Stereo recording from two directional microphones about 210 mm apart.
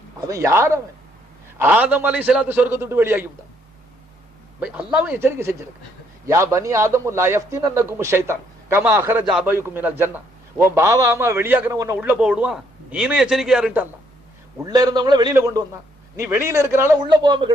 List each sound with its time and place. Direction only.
0.3 s a man's voice: 15° right (ahead or behind)
4.6 s a man's voice: 10° right (ahead or behind)
14.6 s a man's voice: 20° right (ahead or behind)